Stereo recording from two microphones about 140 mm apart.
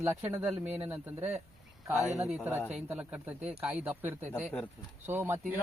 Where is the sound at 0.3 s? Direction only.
15° right (ahead or behind).